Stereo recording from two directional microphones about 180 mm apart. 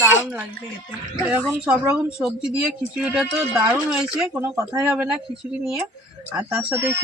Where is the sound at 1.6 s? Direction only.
5° right (ahead or behind).